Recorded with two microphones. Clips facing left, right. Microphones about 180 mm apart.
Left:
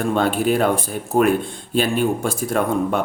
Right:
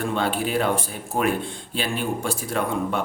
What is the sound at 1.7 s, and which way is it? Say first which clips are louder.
Speech: left 8 dB; 50° left (ahead or behind).